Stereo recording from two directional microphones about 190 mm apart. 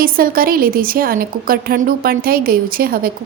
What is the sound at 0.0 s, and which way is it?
Speech, 50° right (ahead or behind).